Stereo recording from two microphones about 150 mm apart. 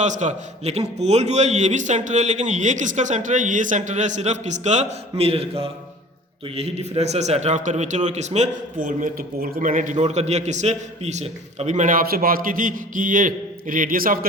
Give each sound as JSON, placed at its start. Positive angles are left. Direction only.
{"t": 0.0, "sound": "a man's voice", "side_deg": -55}